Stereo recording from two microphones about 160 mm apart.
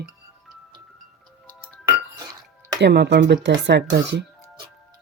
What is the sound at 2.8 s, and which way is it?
Speech, 90° right.